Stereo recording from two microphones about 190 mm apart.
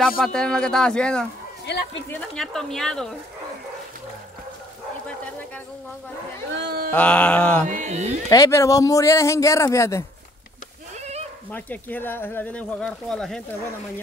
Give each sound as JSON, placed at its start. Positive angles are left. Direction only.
{"t": 0.2, "sound": "speech", "side_deg": 5}
{"t": 1.7, "sound": "a sound", "side_deg": 65}
{"t": 2.0, "sound": "speech", "side_deg": 5}
{"t": 6.5, "sound": "speech", "side_deg": -60}
{"t": 6.9, "sound": "speech", "side_deg": 5}
{"t": 7.6, "sound": "mantra", "side_deg": -40}
{"t": 8.3, "sound": "speech", "side_deg": 15}
{"t": 11.0, "sound": "goat", "side_deg": -35}
{"t": 11.5, "sound": "speech", "side_deg": 10}